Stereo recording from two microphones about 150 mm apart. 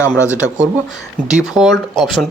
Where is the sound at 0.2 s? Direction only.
20° left (ahead or behind).